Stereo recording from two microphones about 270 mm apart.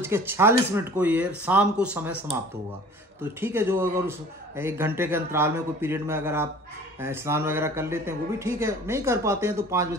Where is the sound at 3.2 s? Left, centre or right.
Centre.